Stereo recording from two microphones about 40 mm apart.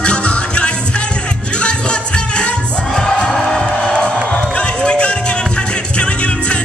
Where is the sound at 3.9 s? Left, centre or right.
Left.